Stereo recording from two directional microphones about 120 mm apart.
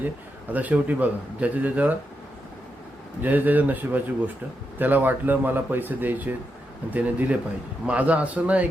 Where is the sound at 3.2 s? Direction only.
15° right (ahead or behind).